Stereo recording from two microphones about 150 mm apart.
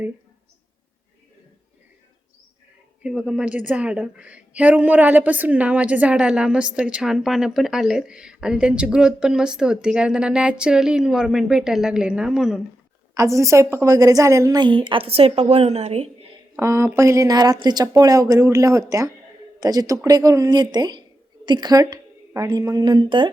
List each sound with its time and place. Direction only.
3.0 s a woman's voice: 5° right (ahead or behind)
13.1 s a woman's voice: 20° right (ahead or behind); by 16.0 s 45° right (ahead or behind)
16.6 s a woman's voice: 20° right (ahead or behind)